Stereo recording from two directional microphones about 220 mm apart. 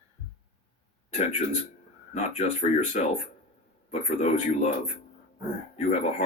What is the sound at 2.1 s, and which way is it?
Speech, 30° left (ahead or behind).